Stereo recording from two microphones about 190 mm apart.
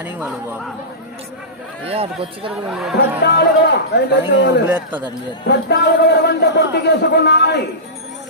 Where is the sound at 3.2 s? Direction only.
60° left (ahead or behind).